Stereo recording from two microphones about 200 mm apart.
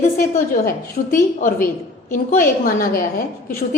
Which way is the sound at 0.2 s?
45° left (ahead or behind).